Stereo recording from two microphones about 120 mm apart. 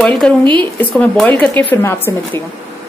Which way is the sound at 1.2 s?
15° left (ahead or behind).